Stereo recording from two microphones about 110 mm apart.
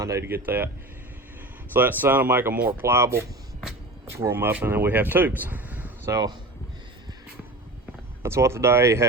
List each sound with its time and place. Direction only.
0.0 s speech: 25° right (ahead or behind)
1.7 s speech: 20° right (ahead or behind)
6.1 s speech: 35° right (ahead or behind)
8.2 s speech: 25° right (ahead or behind)